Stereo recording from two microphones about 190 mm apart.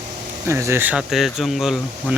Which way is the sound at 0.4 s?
15° right (ahead or behind).